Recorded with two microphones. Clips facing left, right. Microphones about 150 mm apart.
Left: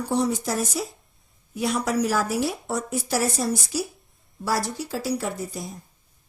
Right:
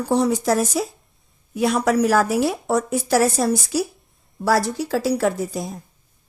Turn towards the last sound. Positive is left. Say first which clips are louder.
# right 8 dB
turn(degrees=-90)